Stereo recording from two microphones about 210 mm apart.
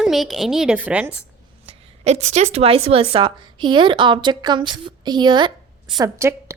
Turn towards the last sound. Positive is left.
turn(degrees=-15)  # may be behind; listen again after turning